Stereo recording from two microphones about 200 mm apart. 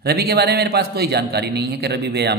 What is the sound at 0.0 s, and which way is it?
Speech, 55° right (ahead or behind).